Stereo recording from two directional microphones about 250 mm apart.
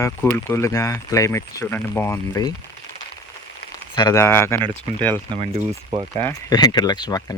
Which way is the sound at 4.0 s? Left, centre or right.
Centre.